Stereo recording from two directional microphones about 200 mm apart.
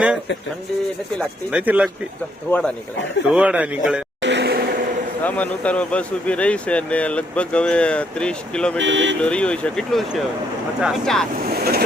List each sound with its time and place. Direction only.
1.5 s speech: 5° right (ahead or behind)
2.5 s speech: 5° left (ahead or behind)
4.2 s vehicle: 60° right (ahead or behind)
5.2 s speech: 5° left (ahead or behind)
8.8 s speech: 65° right (ahead or behind)
9.2 s speech: 5° left (ahead or behind)
11.4 s vehicle: 50° right (ahead or behind)